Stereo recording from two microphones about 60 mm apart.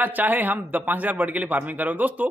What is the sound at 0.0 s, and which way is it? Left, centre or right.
A man's voice, right.